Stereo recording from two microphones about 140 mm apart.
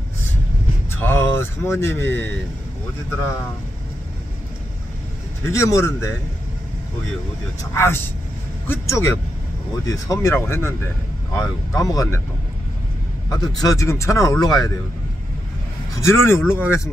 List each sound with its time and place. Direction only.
0.9 s speech: 15° left (ahead or behind)
5.4 s speech: 20° left (ahead or behind)
7.7 s speech: 15° left (ahead or behind)
13.3 s speech: 25° left (ahead or behind)
16.0 s speech: 20° left (ahead or behind)